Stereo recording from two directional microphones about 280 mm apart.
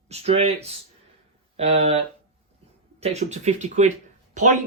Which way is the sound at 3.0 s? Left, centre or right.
Right.